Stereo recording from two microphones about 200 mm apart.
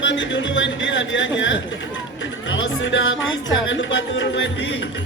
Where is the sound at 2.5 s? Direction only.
65° left (ahead or behind).